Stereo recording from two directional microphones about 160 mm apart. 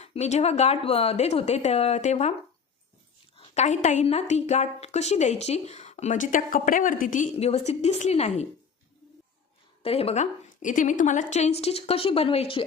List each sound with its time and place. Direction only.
0.0 s speech: 45° left (ahead or behind)
3.3 s a woman's voice: 45° left (ahead or behind)
9.8 s speech: 40° left (ahead or behind)
10.6 s speech: 55° left (ahead or behind); by 12.6 s 35° left (ahead or behind)